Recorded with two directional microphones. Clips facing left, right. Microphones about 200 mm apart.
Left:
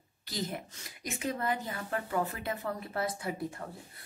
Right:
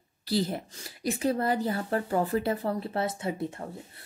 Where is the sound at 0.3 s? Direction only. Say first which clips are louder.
Right 9 dB; 30° right (ahead or behind).